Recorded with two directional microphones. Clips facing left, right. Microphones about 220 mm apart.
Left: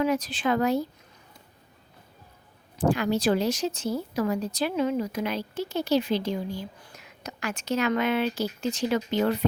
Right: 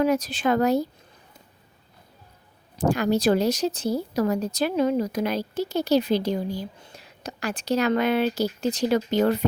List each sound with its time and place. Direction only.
0.0 s speech: 40° right (ahead or behind)
2.7 s speech: 40° right (ahead or behind)